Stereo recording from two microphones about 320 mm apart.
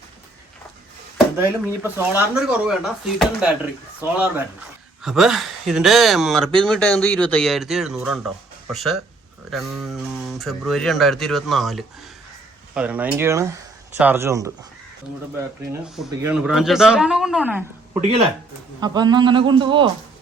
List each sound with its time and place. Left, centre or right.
1.5 s a man's voice: centre
16.0 s speech: centre
18.8 s a man's voice: centre